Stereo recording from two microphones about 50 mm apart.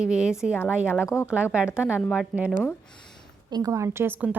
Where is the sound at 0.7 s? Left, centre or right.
Right.